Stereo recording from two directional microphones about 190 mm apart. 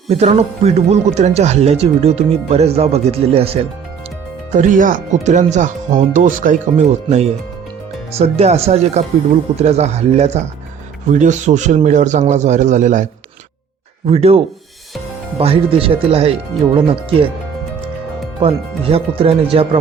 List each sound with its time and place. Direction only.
0.1 s speech: 35° right (ahead or behind)
4.5 s speech: 45° right (ahead or behind)
14.1 s speech: 30° right (ahead or behind)
18.3 s speech: 30° right (ahead or behind)